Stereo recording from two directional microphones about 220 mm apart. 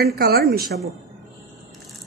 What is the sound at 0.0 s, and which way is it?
Speech, 45° right (ahead or behind).